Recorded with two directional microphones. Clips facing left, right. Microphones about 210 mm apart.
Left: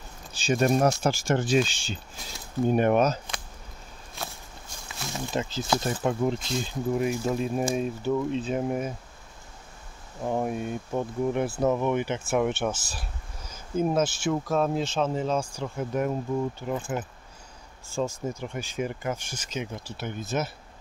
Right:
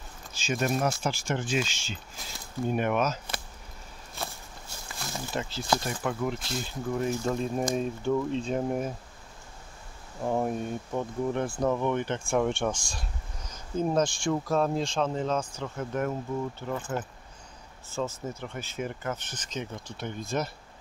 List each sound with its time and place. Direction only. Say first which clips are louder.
0.4 s speech: left 5 dB; 35° left (ahead or behind)
2.7 s speech: left 5 dB; 40° left (ahead or behind)
4.1 s a sound: even; centre (ahead or behind)
5.3 s speech: left 2 dB; 20° left (ahead or behind)
10.2 s speech: even; 5° left (ahead or behind)